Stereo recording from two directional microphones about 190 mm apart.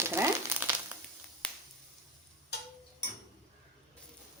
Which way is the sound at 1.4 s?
5° left (ahead or behind).